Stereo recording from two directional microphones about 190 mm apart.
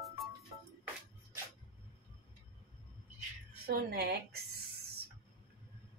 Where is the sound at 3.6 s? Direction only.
55° right (ahead or behind).